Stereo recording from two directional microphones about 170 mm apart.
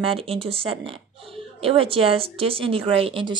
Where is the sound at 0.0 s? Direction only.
35° right (ahead or behind).